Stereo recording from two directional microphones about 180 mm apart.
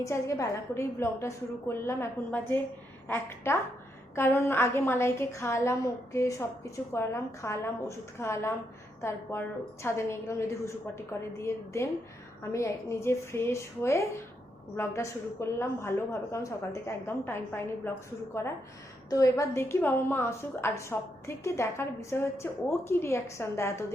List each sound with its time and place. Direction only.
0.0 s a woman's voice: 15° left (ahead or behind)
19.1 s a woman's voice: 20° left (ahead or behind)